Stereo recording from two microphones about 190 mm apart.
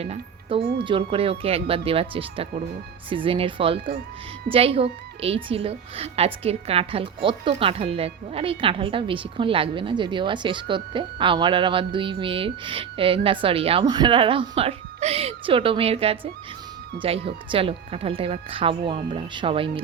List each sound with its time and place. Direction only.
0.0 s speech: 30° right (ahead or behind)